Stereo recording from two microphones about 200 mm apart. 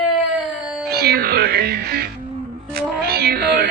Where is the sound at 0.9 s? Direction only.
50° right (ahead or behind).